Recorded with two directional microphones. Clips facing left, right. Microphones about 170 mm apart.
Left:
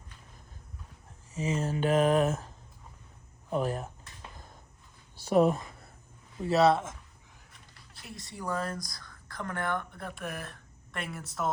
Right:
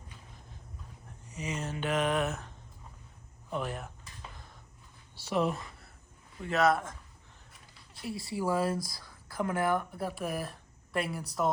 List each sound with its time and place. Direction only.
1.6 s mantra: 40° left (ahead or behind)
3.5 s mantra: 40° left (ahead or behind)
5.2 s speech: 45° left (ahead or behind)
6.4 s mantra: 35° left (ahead or behind)
7.9 s speech: 5° right (ahead or behind)